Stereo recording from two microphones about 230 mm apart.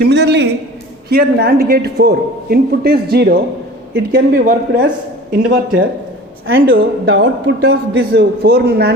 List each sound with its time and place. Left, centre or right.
0.0 s a man's voice: right
6.5 s a man's voice: right